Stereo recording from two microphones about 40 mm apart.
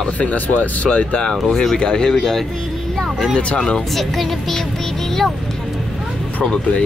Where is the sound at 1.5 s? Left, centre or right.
Centre.